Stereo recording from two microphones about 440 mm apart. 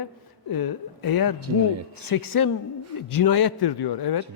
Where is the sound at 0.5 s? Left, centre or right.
Left.